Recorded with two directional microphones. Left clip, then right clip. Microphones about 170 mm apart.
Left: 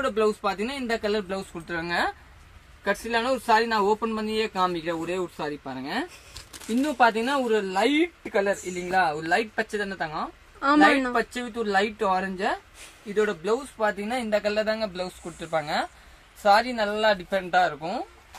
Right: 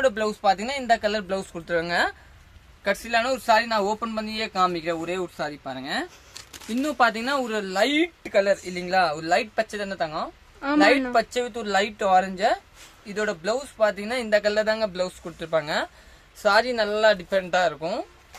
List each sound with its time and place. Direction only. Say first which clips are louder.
0.0 s speech: right 2 dB; 40° right (ahead or behind)
1.5 s speech: right 6 dB; 60° right (ahead or behind)
2.8 s speech: right 2 dB; 25° right (ahead or behind)
7.0 s speech: even; 30° right (ahead or behind)
14.3 s speech: right 4 dB; 55° right (ahead or behind)